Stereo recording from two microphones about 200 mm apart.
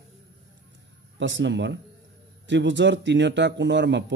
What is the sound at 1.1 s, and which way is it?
Speech, 65° right (ahead or behind).